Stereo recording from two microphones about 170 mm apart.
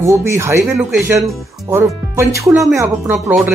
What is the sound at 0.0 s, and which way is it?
Speech, 15° right (ahead or behind).